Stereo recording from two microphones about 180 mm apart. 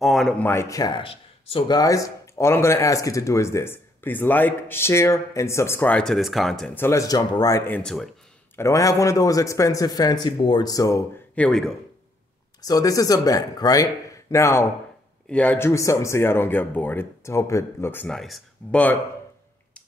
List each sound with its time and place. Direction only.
0.0 s speech: centre (ahead or behind)
0.5 s speech: 15° left (ahead or behind)
8.5 s speech: 15° left (ahead or behind)
12.6 s speech: 20° left (ahead or behind)